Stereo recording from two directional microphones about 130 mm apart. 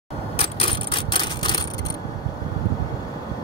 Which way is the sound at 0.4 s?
45° left (ahead or behind).